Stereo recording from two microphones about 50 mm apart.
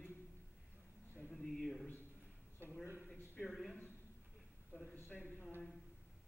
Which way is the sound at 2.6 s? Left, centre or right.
Right.